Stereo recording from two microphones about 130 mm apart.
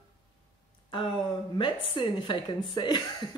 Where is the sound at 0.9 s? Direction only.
40° left (ahead or behind).